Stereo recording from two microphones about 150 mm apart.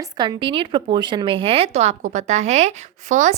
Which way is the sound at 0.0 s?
30° right (ahead or behind).